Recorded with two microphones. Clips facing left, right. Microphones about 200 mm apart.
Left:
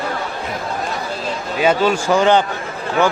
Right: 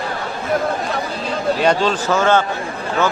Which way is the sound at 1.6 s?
5° left (ahead or behind).